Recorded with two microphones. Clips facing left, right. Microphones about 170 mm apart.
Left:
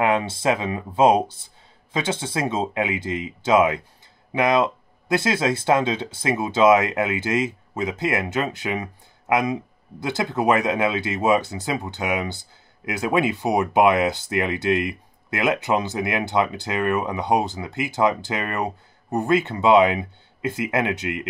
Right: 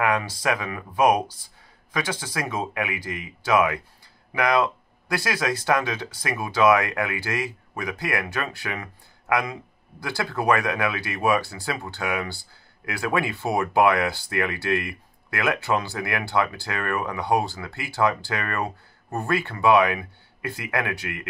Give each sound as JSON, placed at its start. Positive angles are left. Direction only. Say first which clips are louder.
{"t": 0.0, "sound": "speech", "louder": "left 3 dB", "side_deg": 25}